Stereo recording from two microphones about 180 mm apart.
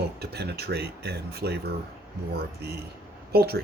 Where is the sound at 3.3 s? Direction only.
60° right (ahead or behind).